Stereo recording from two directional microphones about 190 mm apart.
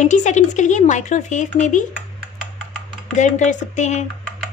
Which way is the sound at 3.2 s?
40° left (ahead or behind).